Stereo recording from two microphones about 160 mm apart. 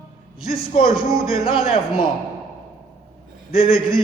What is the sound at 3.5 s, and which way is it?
Speech, 35° left (ahead or behind).